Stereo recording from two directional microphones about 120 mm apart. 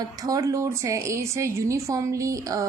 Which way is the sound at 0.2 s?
30° right (ahead or behind).